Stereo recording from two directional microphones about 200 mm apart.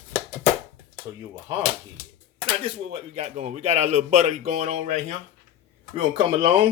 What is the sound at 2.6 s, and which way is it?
A man's voice, 30° right (ahead or behind).